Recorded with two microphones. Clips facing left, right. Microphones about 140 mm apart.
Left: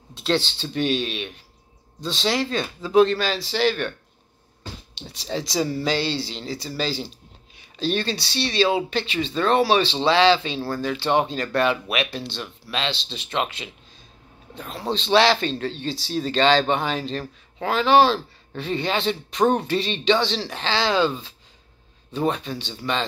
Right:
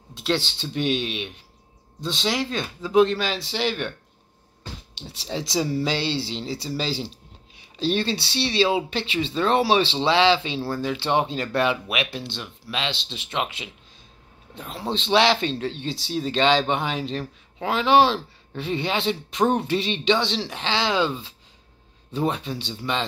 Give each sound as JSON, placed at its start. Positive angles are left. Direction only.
{"t": 0.1, "sound": "a sound", "side_deg": -15}
{"t": 0.8, "sound": "speech", "side_deg": -20}
{"t": 2.5, "sound": "speech", "side_deg": 0}
{"t": 3.2, "sound": "speech", "side_deg": -20}
{"t": 5.1, "sound": "speech", "side_deg": -25}
{"t": 19.3, "sound": "speech", "side_deg": -5}